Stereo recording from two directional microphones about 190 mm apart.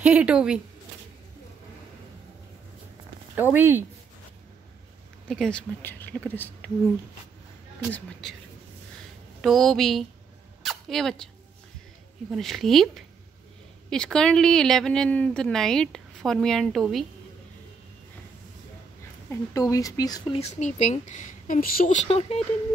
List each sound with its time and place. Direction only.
0.0 s speech: 5° right (ahead or behind)
3.5 s speech: 10° right (ahead or behind)
5.3 s a woman's voice: 5° left (ahead or behind)
9.4 s a woman's voice: centre (ahead or behind)
10.6 s a sound: centre (ahead or behind)
12.3 s a woman's voice: centre (ahead or behind)
19.5 s speech: 20° left (ahead or behind)
20.3 s a woman's voice: 35° left (ahead or behind)